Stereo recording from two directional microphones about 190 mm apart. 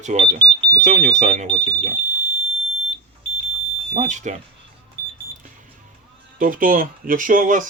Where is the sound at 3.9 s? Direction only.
40° right (ahead or behind).